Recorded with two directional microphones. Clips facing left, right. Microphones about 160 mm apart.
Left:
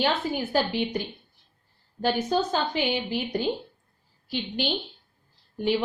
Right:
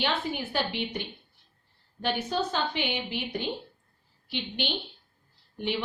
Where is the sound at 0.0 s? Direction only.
40° left (ahead or behind).